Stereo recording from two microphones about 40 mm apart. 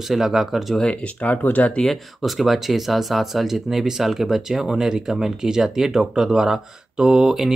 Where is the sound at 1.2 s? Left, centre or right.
Left.